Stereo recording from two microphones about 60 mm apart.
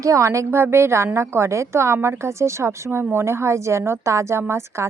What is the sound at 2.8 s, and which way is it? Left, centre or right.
A woman's voice, right.